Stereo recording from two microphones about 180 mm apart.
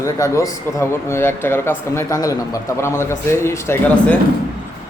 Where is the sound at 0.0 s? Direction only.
15° left (ahead or behind).